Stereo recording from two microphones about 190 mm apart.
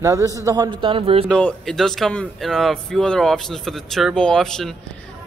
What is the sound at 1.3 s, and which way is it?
Speech, 5° left (ahead or behind).